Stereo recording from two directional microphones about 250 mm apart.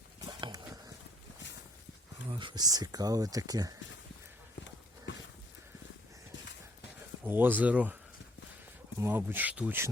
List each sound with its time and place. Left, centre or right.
0.3 s a sound: centre
2.3 s speech: centre
7.3 s speech: centre
9.0 s speech: centre